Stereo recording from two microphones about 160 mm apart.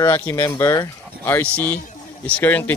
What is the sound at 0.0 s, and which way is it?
Speech, 15° left (ahead or behind).